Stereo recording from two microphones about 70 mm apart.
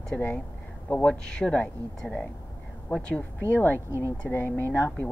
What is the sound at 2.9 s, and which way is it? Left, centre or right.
Speech, centre.